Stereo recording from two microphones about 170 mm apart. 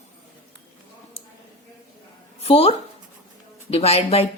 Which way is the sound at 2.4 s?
35° left (ahead or behind).